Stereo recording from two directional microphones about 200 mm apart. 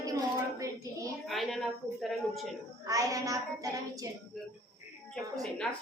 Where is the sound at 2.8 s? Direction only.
15° right (ahead or behind).